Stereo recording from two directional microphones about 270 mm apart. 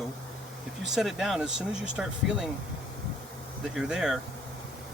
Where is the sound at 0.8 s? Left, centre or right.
Centre.